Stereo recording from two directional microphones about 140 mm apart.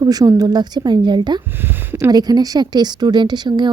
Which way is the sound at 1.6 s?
15° right (ahead or behind).